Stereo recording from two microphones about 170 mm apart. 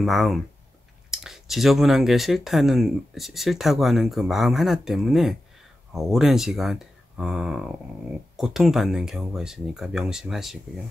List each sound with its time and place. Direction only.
0.0 s speech: centre (ahead or behind)